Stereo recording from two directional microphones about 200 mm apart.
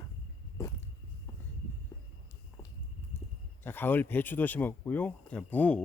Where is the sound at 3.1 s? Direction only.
10° left (ahead or behind).